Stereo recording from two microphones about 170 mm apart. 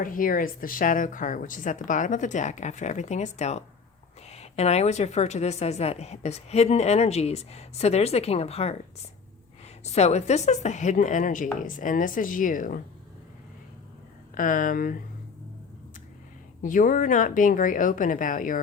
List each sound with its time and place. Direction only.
0.0 s speech: 55° left (ahead or behind); by 8.7 s 40° left (ahead or behind)
9.8 s speech: 40° left (ahead or behind)
14.3 s speech: 50° left (ahead or behind)
16.6 s speech: 50° left (ahead or behind)